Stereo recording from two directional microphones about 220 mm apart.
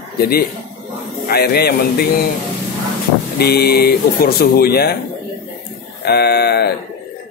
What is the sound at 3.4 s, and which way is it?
A woman's voice, 45° left (ahead or behind).